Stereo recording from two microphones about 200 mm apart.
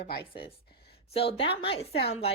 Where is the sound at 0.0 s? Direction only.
55° left (ahead or behind).